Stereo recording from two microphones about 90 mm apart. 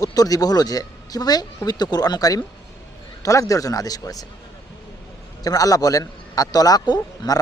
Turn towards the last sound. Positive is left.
turn(degrees=50)  # may be behind; listen again after turning